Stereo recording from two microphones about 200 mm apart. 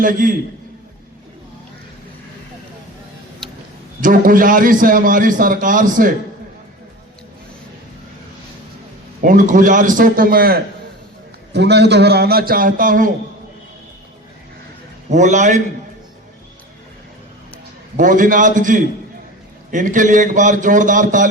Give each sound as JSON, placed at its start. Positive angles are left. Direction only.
{"t": 0.0, "sound": "a man's voice", "side_deg": -45}
{"t": 3.4, "sound": "tick-tock", "side_deg": 0}
{"t": 4.0, "sound": "a man's voice", "side_deg": -45}
{"t": 9.2, "sound": "a man's voice", "side_deg": -40}
{"t": 15.1, "sound": "a man's voice", "side_deg": -35}
{"t": 17.9, "sound": "a man's voice", "side_deg": -40}